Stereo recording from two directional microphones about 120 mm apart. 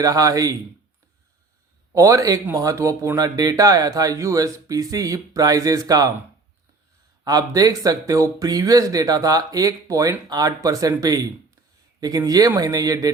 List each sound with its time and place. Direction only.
0.0 s speech: 30° right (ahead or behind)
1.9 s speech: 30° right (ahead or behind)
7.3 s speech: 30° right (ahead or behind)